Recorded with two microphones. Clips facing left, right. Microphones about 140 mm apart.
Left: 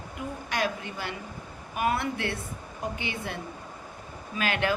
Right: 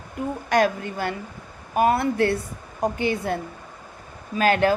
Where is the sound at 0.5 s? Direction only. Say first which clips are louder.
Right 10 dB; 45° right (ahead or behind).